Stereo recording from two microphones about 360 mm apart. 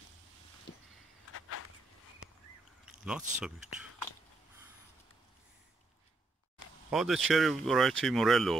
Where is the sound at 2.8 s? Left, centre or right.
Centre.